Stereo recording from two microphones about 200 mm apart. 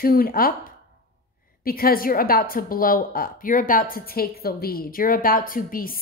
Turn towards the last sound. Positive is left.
turn(degrees=45)  # may be behind; listen again after turning